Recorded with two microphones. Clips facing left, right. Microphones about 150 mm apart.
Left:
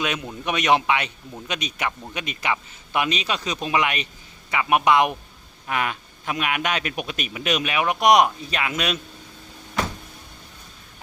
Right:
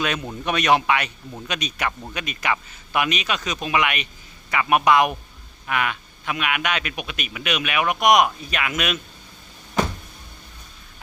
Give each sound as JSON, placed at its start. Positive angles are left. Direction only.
{"t": 0.4, "sound": "a man's voice", "side_deg": 20}
{"t": 4.5, "sound": "a man's voice", "side_deg": 20}
{"t": 5.6, "sound": "a man's voice", "side_deg": 35}